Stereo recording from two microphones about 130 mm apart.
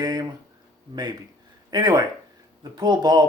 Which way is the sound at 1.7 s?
30° right (ahead or behind).